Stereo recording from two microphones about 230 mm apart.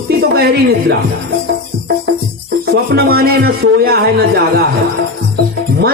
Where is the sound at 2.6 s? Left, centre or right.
Right.